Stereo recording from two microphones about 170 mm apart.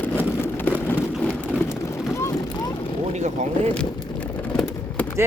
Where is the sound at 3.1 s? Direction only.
40° right (ahead or behind).